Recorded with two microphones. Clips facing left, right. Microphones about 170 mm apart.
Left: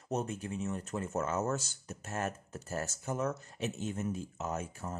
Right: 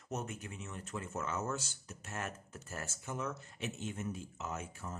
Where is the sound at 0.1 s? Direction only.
30° left (ahead or behind).